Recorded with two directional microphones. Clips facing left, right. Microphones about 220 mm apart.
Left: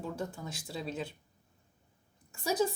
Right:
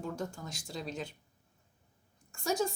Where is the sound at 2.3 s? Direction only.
5° left (ahead or behind).